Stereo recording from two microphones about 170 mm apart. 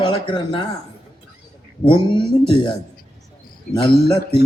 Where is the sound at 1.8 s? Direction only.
30° left (ahead or behind).